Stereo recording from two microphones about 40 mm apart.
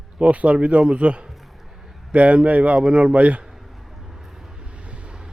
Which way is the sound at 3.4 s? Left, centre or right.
Centre.